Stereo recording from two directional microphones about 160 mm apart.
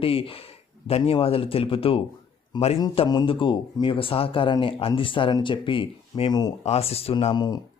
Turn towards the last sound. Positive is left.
turn(degrees=25)  # may be behind; listen again after turning